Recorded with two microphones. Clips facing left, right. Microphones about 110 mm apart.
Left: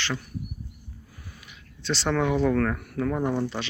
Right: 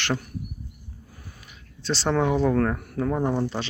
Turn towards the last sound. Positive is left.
turn(degrees=-35)  # may be behind; listen again after turning